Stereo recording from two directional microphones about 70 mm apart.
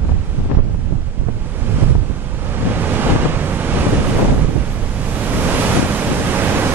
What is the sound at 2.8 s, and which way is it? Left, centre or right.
Waves, right.